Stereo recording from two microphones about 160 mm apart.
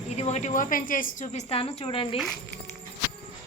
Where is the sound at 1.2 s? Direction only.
45° left (ahead or behind).